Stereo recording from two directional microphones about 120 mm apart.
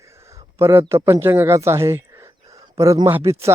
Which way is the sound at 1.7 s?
25° right (ahead or behind).